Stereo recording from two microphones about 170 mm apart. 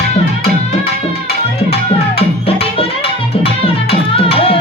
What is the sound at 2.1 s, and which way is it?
Music, 35° left (ahead or behind).